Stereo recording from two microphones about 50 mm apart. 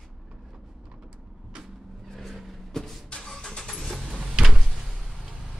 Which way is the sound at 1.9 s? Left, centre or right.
Centre.